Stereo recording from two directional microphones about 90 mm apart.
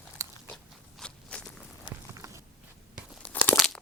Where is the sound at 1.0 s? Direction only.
10° left (ahead or behind).